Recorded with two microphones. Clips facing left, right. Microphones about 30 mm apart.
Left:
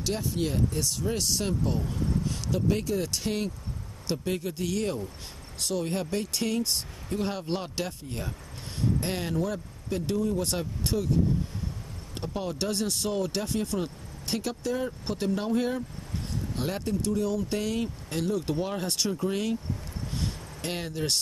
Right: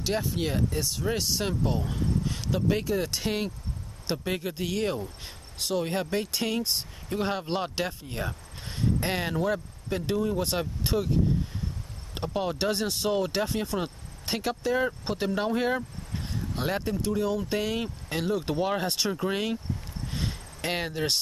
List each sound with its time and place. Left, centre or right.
0.0 s speech: centre
12.1 s speech: right
16.5 s speech: centre
20.1 s vehicle: centre